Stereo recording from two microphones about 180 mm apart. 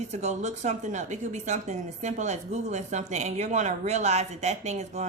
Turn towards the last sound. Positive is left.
turn(degrees=-40)  # may be behind; listen again after turning